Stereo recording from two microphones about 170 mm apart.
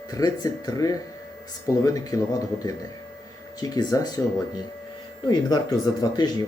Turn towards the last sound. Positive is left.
turn(degrees=25)  # may be behind; listen again after turning